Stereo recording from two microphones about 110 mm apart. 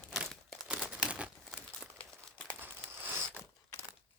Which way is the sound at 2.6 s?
20° right (ahead or behind).